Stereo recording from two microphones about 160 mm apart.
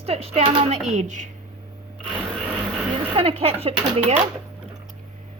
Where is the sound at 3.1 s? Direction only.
40° right (ahead or behind).